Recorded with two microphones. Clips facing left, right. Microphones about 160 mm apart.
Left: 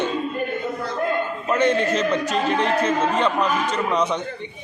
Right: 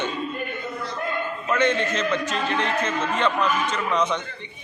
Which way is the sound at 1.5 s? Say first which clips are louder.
Left 3 dB; 35° left (ahead or behind).